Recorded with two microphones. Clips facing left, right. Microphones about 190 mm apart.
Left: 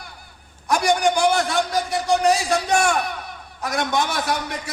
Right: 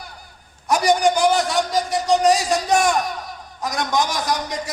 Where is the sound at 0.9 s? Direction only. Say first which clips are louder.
Right 2 dB; 15° right (ahead or behind).